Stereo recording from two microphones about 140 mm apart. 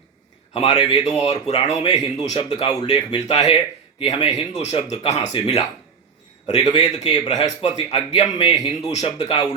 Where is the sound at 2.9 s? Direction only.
50° left (ahead or behind).